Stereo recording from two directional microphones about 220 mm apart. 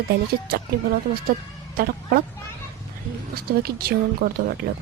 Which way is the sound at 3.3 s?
45° right (ahead or behind).